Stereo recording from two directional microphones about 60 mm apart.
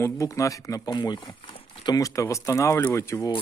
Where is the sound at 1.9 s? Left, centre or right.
Left.